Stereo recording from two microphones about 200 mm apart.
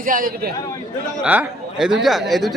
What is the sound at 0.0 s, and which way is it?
Speech, 45° right (ahead or behind).